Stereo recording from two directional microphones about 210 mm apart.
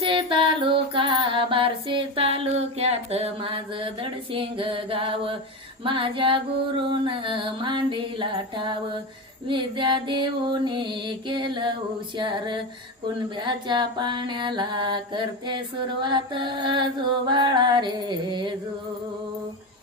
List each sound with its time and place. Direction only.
0.0 s female singing: 25° right (ahead or behind)
5.8 s mantra: 25° right (ahead or behind)